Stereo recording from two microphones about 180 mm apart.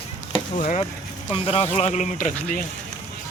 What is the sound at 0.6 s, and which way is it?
Speech, 50° left (ahead or behind).